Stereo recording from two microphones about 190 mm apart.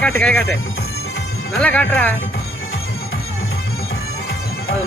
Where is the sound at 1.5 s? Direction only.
5° left (ahead or behind).